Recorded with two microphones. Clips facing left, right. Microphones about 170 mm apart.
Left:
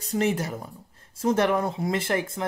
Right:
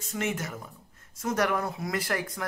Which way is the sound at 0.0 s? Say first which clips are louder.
Left 7 dB; 35° left (ahead or behind).